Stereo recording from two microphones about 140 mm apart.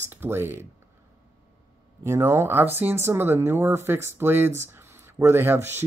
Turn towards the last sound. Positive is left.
turn(degrees=-15)  # may be behind; listen again after turning